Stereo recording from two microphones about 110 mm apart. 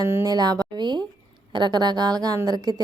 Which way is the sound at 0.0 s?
35° right (ahead or behind).